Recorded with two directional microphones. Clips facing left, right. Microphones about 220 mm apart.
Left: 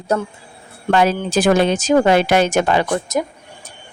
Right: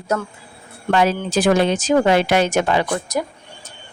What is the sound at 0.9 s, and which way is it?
Speech, 50° left (ahead or behind).